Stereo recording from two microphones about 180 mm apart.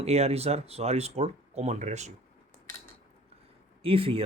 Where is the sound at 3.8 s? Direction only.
30° right (ahead or behind).